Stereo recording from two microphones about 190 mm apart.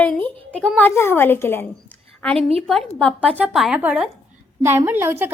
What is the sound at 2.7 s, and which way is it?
A woman's voice, centre (ahead or behind).